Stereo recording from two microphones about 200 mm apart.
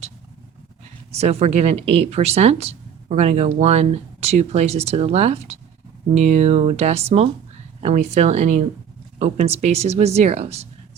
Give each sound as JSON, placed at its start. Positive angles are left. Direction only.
{"t": 1.1, "sound": "speech", "side_deg": -30}